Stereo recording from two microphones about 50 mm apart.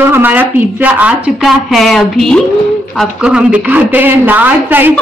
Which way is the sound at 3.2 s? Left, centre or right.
Centre.